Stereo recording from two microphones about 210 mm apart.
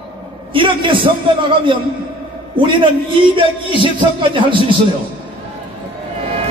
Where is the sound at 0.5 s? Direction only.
25° right (ahead or behind).